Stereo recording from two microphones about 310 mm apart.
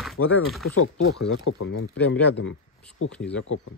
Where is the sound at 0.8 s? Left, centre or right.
Left.